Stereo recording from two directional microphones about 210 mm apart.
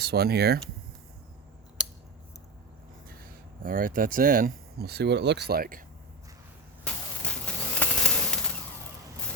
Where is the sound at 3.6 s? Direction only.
40° right (ahead or behind).